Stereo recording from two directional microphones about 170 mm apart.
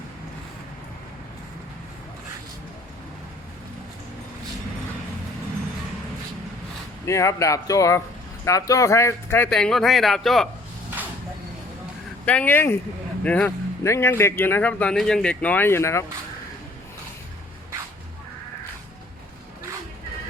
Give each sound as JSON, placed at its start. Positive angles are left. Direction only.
{"t": 7.0, "sound": "speech", "side_deg": 20}
{"t": 9.5, "sound": "speech", "side_deg": 5}
{"t": 12.2, "sound": "speech", "side_deg": 10}